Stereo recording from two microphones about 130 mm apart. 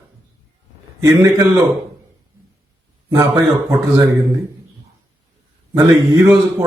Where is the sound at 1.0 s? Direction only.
25° right (ahead or behind).